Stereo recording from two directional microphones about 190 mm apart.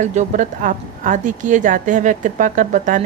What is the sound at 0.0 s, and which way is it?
A woman's voice, 40° right (ahead or behind).